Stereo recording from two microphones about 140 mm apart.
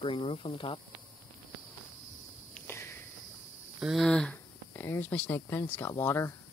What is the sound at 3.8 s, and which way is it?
Speech, centre (ahead or behind).